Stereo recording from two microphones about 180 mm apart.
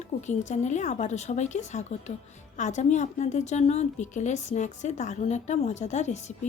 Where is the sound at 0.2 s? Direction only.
40° left (ahead or behind).